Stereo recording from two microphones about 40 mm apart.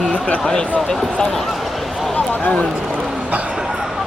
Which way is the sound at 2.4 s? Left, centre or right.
Left.